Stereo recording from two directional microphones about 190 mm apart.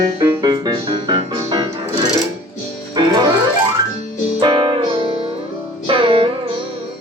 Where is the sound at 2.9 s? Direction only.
20° right (ahead or behind).